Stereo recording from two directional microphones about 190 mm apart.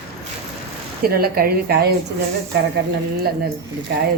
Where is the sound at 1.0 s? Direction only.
50° right (ahead or behind).